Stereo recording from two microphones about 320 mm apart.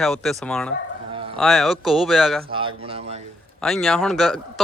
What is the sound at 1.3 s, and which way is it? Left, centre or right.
Speech, centre.